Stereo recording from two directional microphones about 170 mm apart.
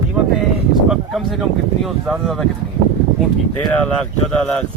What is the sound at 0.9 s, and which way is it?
Speech, centre (ahead or behind).